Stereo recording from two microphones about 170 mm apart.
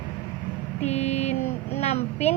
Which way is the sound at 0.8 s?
40° left (ahead or behind).